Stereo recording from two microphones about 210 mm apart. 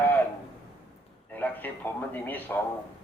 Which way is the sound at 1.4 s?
10° left (ahead or behind).